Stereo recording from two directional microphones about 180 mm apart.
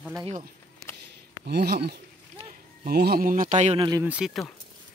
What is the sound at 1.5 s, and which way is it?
Speech, 65° right (ahead or behind).